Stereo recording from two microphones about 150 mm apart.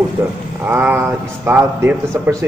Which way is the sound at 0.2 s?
15° right (ahead or behind).